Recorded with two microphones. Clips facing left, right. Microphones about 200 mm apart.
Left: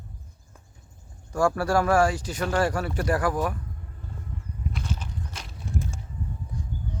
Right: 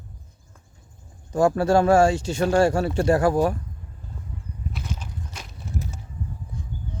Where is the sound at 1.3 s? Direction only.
20° right (ahead or behind).